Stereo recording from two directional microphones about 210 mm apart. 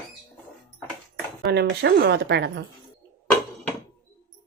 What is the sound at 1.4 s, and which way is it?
Speech, 50° right (ahead or behind).